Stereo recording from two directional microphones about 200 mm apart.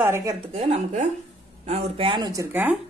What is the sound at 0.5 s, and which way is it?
A woman's voice, 30° right (ahead or behind).